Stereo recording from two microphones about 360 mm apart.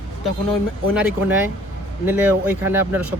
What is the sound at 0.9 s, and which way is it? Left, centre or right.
Speech, centre.